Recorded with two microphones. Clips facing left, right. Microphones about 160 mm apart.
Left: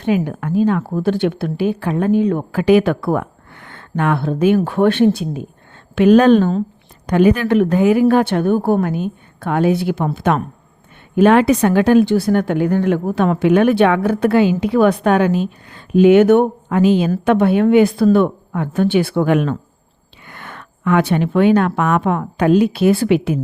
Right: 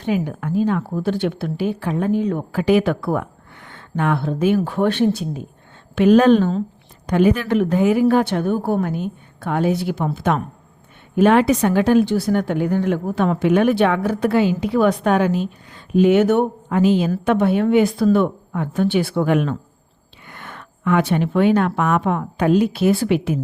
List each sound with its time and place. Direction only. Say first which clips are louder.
0.0 s speech: left 4 dB; 60° left (ahead or behind)
5.9 s a woman's voice: left 2 dB; 70° left (ahead or behind)
11.1 s a woman's voice: left 3 dB; 90° left
17.1 s a woman's voice: left 3 dB; 65° left (ahead or behind); by 23.4 s 90° left